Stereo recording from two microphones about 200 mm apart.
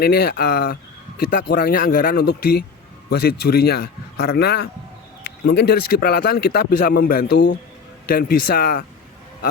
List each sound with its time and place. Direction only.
0.0 s a man's voice: 50° left (ahead or behind)